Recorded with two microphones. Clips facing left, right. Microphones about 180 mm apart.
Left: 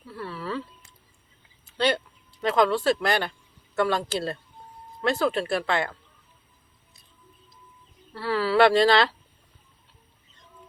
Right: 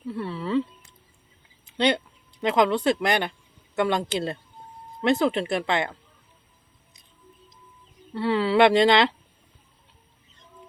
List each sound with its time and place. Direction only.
0.0 s a sound: 25° right (ahead or behind)
2.4 s speech: 20° right (ahead or behind)
8.1 s speech: 20° right (ahead or behind)